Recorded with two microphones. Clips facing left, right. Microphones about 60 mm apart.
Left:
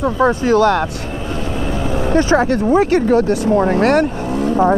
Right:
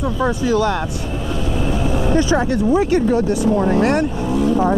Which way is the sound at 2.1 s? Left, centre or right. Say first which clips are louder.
Left 5 dB; left.